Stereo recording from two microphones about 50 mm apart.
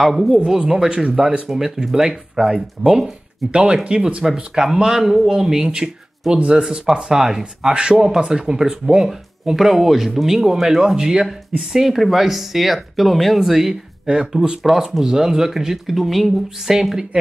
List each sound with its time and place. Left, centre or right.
0.0 s speech: centre; by 1.4 s right
1.5 s speech: centre
4.6 s speech: centre
14.6 s speech: centre